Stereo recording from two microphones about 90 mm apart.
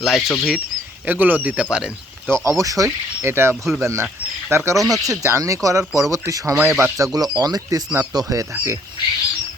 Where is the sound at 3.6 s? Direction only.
Centre (ahead or behind).